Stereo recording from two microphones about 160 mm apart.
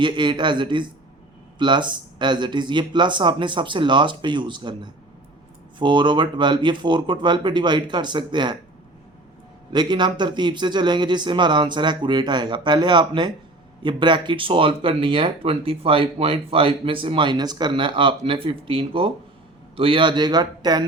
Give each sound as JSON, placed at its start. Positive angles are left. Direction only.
{"t": 0.0, "sound": "a man's voice", "side_deg": -30}
{"t": 9.7, "sound": "a man's voice", "side_deg": -25}